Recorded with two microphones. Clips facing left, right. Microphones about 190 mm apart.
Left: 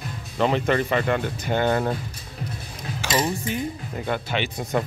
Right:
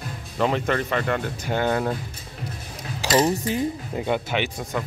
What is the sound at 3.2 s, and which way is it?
Speech, 20° right (ahead or behind).